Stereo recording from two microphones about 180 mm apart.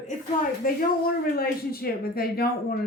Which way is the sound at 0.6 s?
50° left (ahead or behind).